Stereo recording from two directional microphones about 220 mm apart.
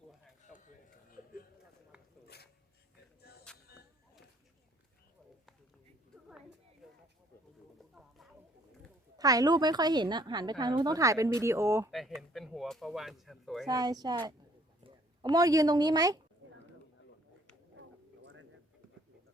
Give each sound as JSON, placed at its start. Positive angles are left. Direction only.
{"t": 1.1, "sound": "a sound", "side_deg": 40}
{"t": 2.2, "sound": "filing", "side_deg": 45}
{"t": 3.2, "sound": "music", "side_deg": 45}
{"t": 7.8, "sound": "music", "side_deg": 0}
{"t": 9.1, "sound": "a woman's voice", "side_deg": -15}
{"t": 11.9, "sound": "speech", "side_deg": 0}
{"t": 13.7, "sound": "a woman's voice", "side_deg": -15}